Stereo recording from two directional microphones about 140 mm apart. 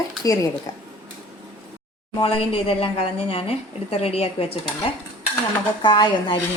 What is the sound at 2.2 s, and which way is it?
A woman's voice, 40° left (ahead or behind).